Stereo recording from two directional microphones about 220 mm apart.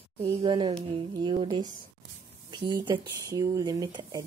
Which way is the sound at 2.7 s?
15° right (ahead or behind).